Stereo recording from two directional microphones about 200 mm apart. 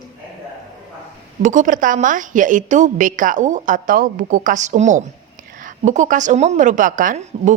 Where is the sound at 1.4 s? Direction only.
40° right (ahead or behind).